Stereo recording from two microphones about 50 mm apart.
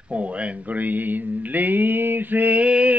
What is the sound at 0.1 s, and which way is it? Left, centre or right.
Mantra, right.